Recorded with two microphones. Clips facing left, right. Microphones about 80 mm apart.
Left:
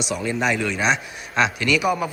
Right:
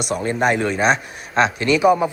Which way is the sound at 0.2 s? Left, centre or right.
Right.